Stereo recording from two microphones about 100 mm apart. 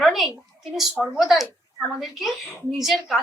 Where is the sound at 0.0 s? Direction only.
Centre (ahead or behind).